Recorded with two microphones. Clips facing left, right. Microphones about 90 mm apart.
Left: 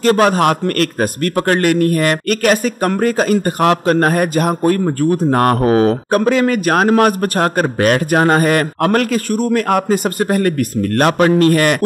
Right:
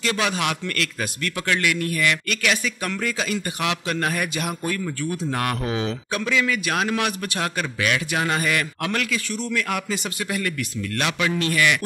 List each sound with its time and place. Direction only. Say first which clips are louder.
0.0 s a man's voice: left 12 dB; 45° left (ahead or behind)